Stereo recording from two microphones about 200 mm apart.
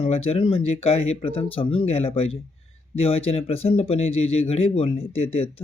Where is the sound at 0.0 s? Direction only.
30° left (ahead or behind).